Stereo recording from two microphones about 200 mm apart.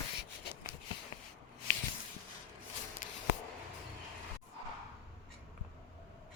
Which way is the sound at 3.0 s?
40° left (ahead or behind).